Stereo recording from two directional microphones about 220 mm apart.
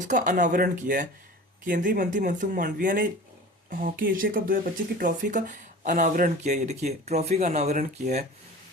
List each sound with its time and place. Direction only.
0.0 s speech: 35° right (ahead or behind)